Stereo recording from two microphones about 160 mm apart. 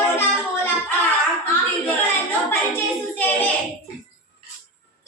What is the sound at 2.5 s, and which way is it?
Singing, 10° left (ahead or behind).